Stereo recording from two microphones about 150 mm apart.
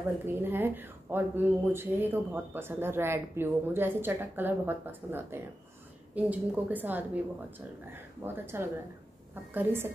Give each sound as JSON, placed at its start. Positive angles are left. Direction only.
{"t": 0.3, "sound": "speech", "side_deg": -15}